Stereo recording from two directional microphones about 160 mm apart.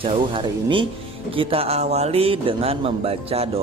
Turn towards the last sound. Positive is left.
turn(degrees=-40)  # may be behind; listen again after turning